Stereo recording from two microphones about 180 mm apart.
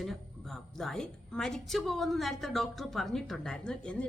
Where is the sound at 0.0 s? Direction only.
Centre (ahead or behind).